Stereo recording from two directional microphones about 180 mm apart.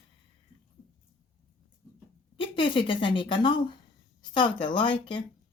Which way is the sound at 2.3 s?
30° left (ahead or behind).